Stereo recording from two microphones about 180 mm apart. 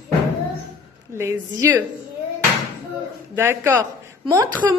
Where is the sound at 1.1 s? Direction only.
15° right (ahead or behind).